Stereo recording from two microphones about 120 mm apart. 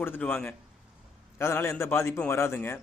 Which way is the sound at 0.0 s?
15° left (ahead or behind).